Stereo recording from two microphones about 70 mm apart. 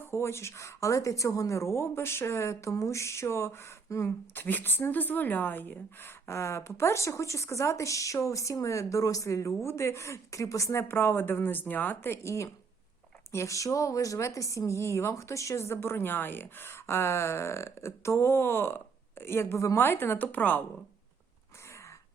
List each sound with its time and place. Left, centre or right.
0.0 s speech: left
4.4 s speech: left
10.8 s speech: left